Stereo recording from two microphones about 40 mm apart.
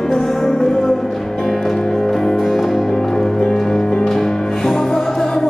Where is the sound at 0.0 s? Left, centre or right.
Centre.